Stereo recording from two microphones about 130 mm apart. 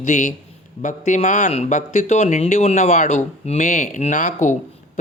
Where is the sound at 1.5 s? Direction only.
65° left (ahead or behind).